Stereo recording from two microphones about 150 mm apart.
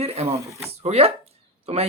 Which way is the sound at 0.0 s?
45° right (ahead or behind).